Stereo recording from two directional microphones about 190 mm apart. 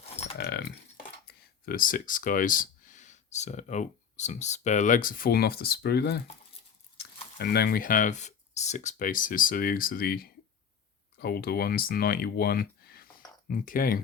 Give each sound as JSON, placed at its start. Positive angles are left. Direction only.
{"t": 0.3, "sound": "keys jangling", "side_deg": 55}
{"t": 1.3, "sound": "speech", "side_deg": 50}